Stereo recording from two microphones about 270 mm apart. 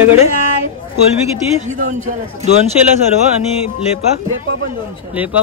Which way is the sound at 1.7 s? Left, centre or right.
Right.